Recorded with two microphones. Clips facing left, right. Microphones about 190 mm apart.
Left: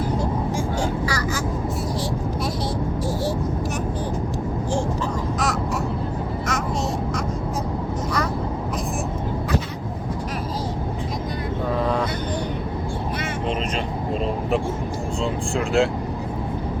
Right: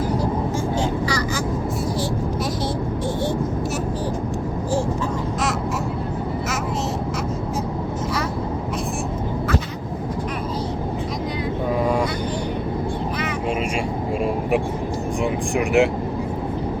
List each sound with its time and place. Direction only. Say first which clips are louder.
15.2 s vehicle: right 3 dB; 15° right (ahead or behind)